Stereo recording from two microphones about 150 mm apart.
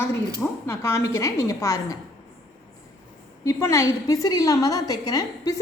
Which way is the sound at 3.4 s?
20° left (ahead or behind).